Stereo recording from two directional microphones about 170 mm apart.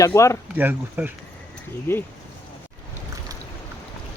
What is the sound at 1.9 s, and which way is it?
Speech, 15° left (ahead or behind).